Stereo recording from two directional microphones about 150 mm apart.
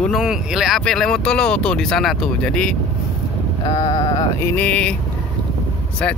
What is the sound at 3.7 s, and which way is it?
Sheep, 30° left (ahead or behind).